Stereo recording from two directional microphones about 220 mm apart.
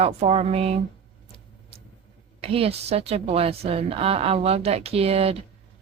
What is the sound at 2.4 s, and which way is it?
A woman's voice, 25° right (ahead or behind).